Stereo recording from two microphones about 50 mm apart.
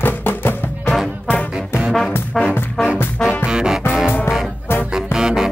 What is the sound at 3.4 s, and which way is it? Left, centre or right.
Music, centre.